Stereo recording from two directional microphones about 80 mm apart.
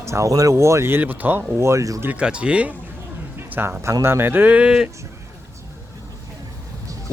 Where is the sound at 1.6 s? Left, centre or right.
Right.